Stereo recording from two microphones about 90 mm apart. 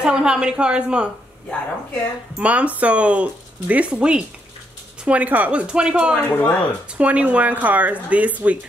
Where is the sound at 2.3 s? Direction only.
15° right (ahead or behind).